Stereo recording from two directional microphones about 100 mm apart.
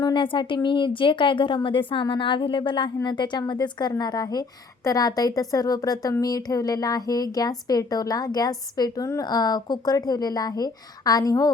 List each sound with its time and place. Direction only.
0.0 s a woman's voice: 55° left (ahead or behind); by 11.5 s 35° left (ahead or behind)